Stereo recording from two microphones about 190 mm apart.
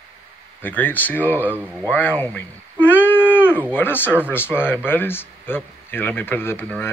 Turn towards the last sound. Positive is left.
turn(degrees=10)  # may be behind; listen again after turning